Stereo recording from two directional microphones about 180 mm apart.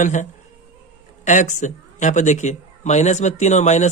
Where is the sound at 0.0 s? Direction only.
45° left (ahead or behind).